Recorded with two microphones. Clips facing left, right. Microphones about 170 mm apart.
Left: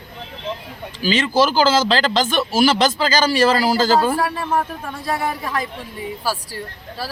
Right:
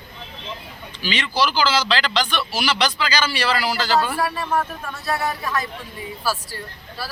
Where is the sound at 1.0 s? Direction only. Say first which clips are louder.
Left 6 dB; 45° left (ahead or behind).